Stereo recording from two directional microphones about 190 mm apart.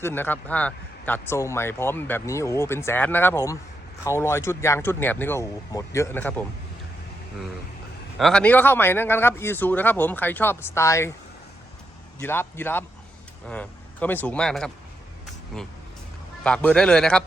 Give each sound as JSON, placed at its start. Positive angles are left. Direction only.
{"t": 0.0, "sound": "speech", "side_deg": 10}
{"t": 8.2, "sound": "speech", "side_deg": 5}
{"t": 12.2, "sound": "speech", "side_deg": 10}
{"t": 16.4, "sound": "speech", "side_deg": 5}